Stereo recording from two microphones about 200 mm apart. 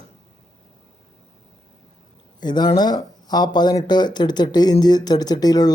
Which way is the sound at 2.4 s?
20° left (ahead or behind).